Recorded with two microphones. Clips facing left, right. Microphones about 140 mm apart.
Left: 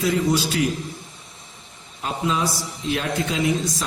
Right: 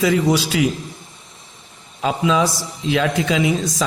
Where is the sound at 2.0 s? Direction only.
90° right.